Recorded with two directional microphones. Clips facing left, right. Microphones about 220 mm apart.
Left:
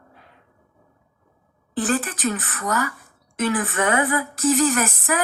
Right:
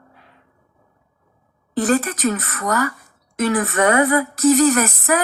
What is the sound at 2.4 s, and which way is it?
Speech, 60° right (ahead or behind).